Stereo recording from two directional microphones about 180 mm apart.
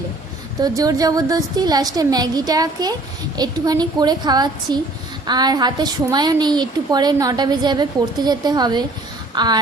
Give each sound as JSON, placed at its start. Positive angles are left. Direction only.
{"t": 0.8, "sound": "a woman's voice", "side_deg": -20}